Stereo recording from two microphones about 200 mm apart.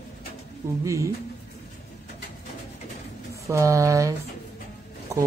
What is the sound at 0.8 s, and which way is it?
Speech, 15° right (ahead or behind).